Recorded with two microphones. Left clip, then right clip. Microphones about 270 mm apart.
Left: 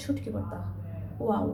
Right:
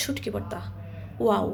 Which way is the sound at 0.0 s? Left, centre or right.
Right.